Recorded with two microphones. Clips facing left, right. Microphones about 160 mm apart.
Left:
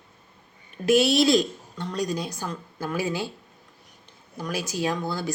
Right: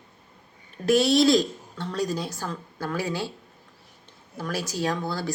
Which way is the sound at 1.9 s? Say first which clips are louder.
Even; 5° right (ahead or behind).